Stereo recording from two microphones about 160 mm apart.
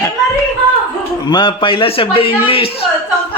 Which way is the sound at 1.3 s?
30° left (ahead or behind).